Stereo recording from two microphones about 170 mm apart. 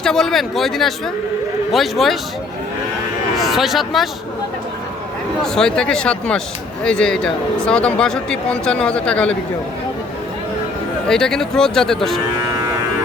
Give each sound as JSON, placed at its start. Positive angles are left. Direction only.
{"t": 0.0, "sound": "speech", "side_deg": 0}
{"t": 3.3, "sound": "speech", "side_deg": 0}
{"t": 5.4, "sound": "speech", "side_deg": 5}
{"t": 11.1, "sound": "speech", "side_deg": 5}